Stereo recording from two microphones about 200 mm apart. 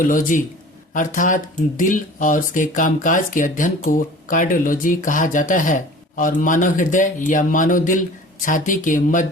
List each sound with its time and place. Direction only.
0.0 s speech: 40° left (ahead or behind)